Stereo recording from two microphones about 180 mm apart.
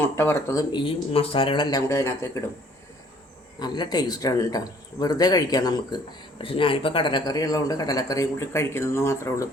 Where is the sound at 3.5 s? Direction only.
25° left (ahead or behind).